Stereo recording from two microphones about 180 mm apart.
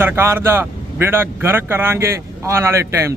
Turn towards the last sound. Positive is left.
turn(degrees=-15)  # may be behind; listen again after turning